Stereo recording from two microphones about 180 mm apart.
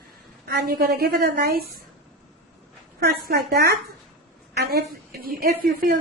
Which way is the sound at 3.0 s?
65° right (ahead or behind).